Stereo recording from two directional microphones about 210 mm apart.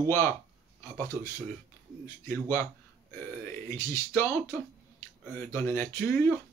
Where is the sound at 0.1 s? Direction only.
10° left (ahead or behind).